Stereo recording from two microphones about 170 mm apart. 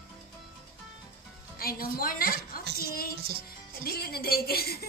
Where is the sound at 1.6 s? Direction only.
60° left (ahead or behind).